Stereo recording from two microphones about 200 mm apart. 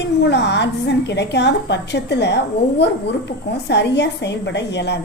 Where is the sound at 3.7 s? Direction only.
60° left (ahead or behind).